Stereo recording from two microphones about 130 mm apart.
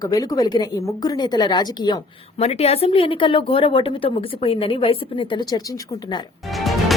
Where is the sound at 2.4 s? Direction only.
50° left (ahead or behind); by 6.2 s 30° left (ahead or behind).